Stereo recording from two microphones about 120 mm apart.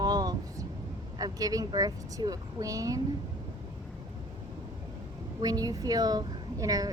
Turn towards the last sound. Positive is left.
turn(degrees=-30)  # may be behind; listen again after turning